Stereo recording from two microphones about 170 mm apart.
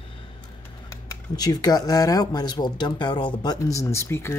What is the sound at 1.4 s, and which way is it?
Speech, 20° left (ahead or behind).